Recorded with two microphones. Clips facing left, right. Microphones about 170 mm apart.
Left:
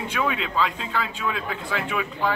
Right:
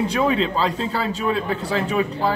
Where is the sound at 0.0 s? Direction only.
35° right (ahead or behind).